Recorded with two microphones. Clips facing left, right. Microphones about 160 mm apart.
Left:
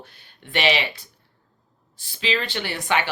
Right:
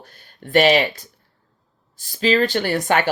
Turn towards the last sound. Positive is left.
turn(degrees=-45)  # may be behind; listen again after turning